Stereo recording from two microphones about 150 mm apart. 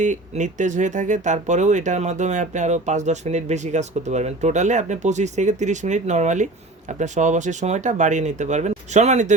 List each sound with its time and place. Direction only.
0.0 s speech: 55° right (ahead or behind)